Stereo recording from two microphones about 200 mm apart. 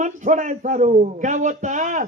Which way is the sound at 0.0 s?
40° right (ahead or behind).